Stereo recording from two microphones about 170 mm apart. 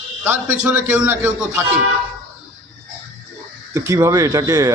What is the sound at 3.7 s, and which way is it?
Speech, 15° right (ahead or behind).